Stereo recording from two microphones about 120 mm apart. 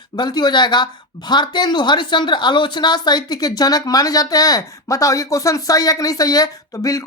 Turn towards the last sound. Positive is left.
turn(degrees=30)  # may be behind; listen again after turning